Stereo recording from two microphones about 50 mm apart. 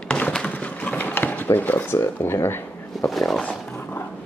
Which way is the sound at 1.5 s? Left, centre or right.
Left.